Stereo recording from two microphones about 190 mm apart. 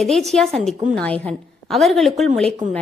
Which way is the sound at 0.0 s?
Centre (ahead or behind).